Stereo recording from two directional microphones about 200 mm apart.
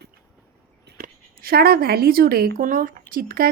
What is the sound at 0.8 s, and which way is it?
Speech, 50° right (ahead or behind).